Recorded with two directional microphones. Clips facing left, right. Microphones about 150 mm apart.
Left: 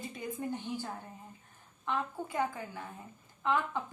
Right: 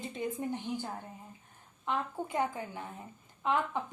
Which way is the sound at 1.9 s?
20° right (ahead or behind).